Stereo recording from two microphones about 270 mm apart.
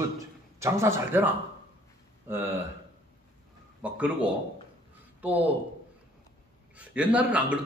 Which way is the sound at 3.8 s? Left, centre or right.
Centre.